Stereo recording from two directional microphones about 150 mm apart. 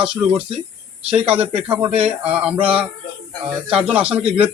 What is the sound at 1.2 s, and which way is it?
Speech, 40° right (ahead or behind).